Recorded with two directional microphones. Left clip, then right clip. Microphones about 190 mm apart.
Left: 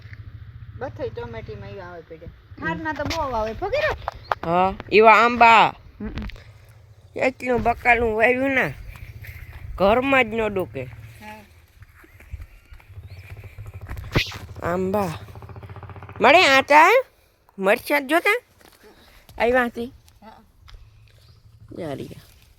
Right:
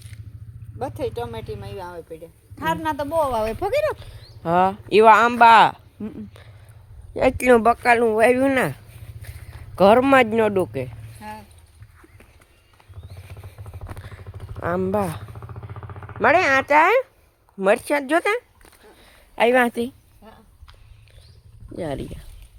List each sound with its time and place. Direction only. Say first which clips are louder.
0.8 s speech: right 3 dB; 20° right (ahead or behind)
3.6 s speech: right 2 dB; 60° right (ahead or behind)
4.1 s speech: even; 5° right (ahead or behind)
7.3 s speech: right 8 dB; 45° right (ahead or behind)
7.6 s speech: right 2 dB; 20° right (ahead or behind)
14.6 s speech: right 1 dB; 10° left (ahead or behind)
15.8 s vehicle: right 2 dB; 50° left (ahead or behind)
16.1 s speech: left 3 dB; 25° left (ahead or behind)
17.6 s speech: right 1 dB; centre (ahead or behind)
19.0 s a sound: right 3 dB; 15° right (ahead or behind)
21.7 s speech: right 3 dB; centre (ahead or behind)